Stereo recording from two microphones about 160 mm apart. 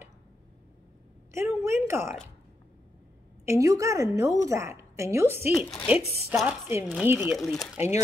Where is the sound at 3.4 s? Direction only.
20° right (ahead or behind).